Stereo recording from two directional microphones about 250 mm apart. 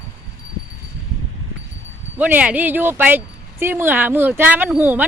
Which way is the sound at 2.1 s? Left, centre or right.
Centre.